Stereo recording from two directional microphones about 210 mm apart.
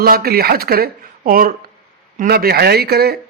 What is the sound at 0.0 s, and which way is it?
Speech, 45° right (ahead or behind).